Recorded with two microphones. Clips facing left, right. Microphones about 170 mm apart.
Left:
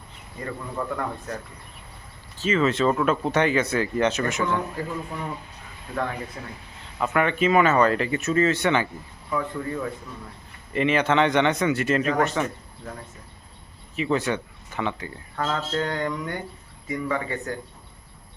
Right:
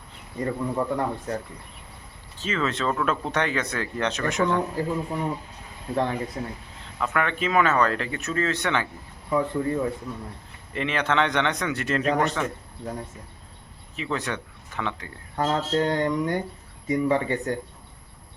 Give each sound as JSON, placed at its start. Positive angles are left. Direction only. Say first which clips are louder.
{"t": 0.8, "sound": "speech", "louder": "right 3 dB", "side_deg": -30}
{"t": 2.4, "sound": "speech", "louder": "left 5 dB", "side_deg": 5}
{"t": 4.4, "sound": "a man's voice", "louder": "right 3 dB", "side_deg": -30}
{"t": 7.0, "sound": "speech", "louder": "left 4 dB", "side_deg": 5}
{"t": 9.3, "sound": "speech", "louder": "right 4 dB", "side_deg": -25}
{"t": 10.7, "sound": "speech", "louder": "left 4 dB", "side_deg": 5}
{"t": 13.9, "sound": "speech", "louder": "left 5 dB", "side_deg": 5}
{"t": 15.4, "sound": "speech", "louder": "right 3 dB", "side_deg": -25}